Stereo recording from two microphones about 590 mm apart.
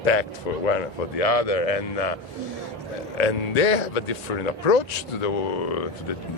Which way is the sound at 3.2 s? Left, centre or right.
Left.